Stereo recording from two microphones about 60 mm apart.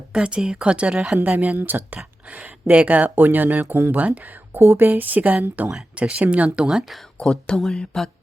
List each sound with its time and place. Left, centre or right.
0.1 s speech: centre
4.6 s speech: right
4.9 s speech: right
7.2 s speech: centre